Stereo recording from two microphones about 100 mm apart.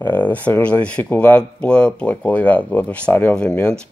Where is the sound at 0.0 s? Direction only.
15° left (ahead or behind).